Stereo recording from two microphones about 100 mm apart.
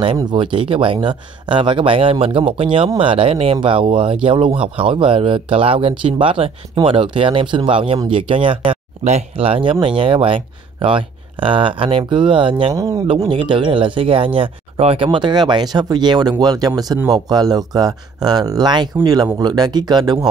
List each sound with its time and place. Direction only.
0.2 s speech: 50° right (ahead or behind); by 3.5 s 75° right (ahead or behind)
3.6 s speech: 60° right (ahead or behind)
12.7 s speech: 35° right (ahead or behind)
13.3 s speech: 55° right (ahead or behind); by 15.0 s 70° right (ahead or behind)
15.0 s speech: 50° right (ahead or behind)